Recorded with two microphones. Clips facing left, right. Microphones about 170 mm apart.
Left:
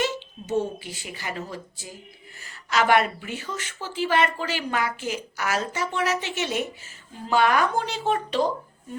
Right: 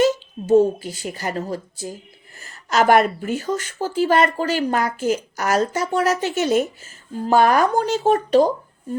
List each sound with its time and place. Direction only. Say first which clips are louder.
0.0 s a woman's voice: right 9 dB; 40° right (ahead or behind)